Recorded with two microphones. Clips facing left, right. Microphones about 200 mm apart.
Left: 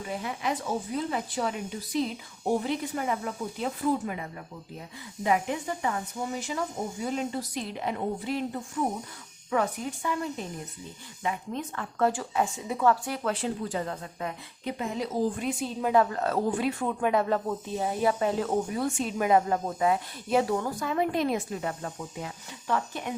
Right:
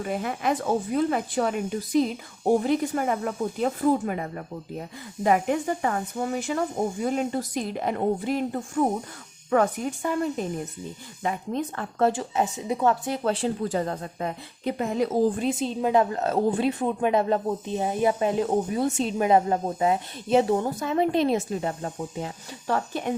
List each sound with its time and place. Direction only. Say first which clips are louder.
0.0 s speech: right 5 dB; 55° right (ahead or behind)
11.2 s a woman's voice: right 4 dB; 40° right (ahead or behind)
14.8 s speech: right 7 dB; 50° right (ahead or behind)
15.4 s a woman's voice: right 5 dB; 25° right (ahead or behind)